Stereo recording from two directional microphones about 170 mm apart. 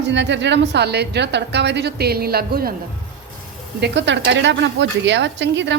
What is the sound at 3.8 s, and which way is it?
A woman's voice, 85° right.